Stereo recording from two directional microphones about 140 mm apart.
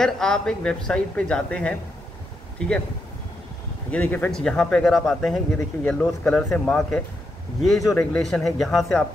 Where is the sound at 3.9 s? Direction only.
10° left (ahead or behind).